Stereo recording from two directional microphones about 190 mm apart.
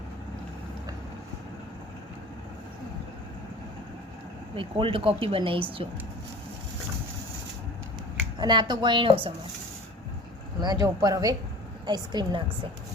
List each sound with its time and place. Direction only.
4.5 s speech: 30° right (ahead or behind)
8.4 s speech: 25° right (ahead or behind)
10.6 s speech: 20° right (ahead or behind)